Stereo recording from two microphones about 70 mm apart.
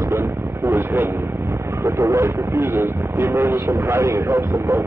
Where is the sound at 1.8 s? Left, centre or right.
Right.